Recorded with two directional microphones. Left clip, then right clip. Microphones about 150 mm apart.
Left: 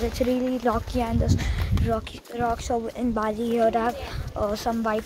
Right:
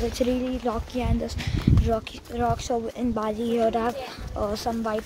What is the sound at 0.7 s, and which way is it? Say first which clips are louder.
Speech: left 5 dB; 25° left (ahead or behind).